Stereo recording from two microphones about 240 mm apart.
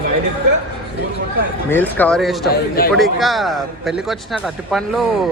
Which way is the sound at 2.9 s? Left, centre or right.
Centre.